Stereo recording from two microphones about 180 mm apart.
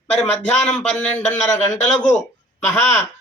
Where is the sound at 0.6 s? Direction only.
5° left (ahead or behind).